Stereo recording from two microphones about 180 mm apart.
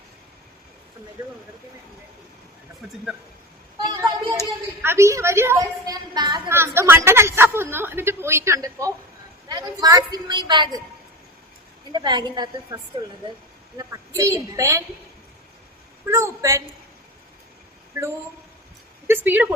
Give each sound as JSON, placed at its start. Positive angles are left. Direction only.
{"t": 3.8, "sound": "a sound", "side_deg": -20}
{"t": 4.8, "sound": "a woman's voice", "side_deg": -15}
{"t": 6.5, "sound": "a woman's voice", "side_deg": -15}
{"t": 11.9, "sound": "a woman's voice", "side_deg": -25}
{"t": 14.2, "sound": "a woman's voice", "side_deg": -15}
{"t": 16.0, "sound": "a woman's voice", "side_deg": -15}
{"t": 19.0, "sound": "a woman's voice", "side_deg": -10}